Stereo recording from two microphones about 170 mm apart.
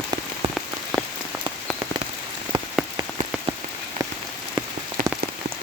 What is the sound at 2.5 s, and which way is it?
Rain on surface, 25° right (ahead or behind).